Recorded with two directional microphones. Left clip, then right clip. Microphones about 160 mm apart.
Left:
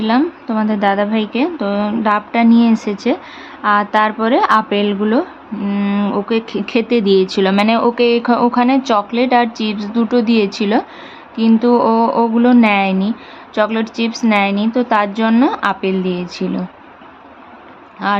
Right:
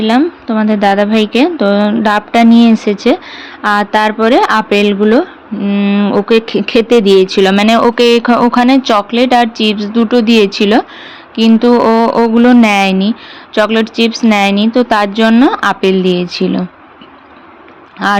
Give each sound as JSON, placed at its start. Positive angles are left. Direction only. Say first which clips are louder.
{"t": 0.0, "sound": "speech", "louder": "right 5 dB", "side_deg": -15}
{"t": 7.5, "sound": "speech", "louder": "right 5 dB", "side_deg": -25}